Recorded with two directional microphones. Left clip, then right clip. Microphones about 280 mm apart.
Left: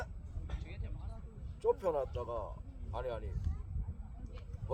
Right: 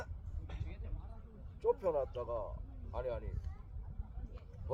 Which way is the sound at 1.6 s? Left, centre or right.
Left.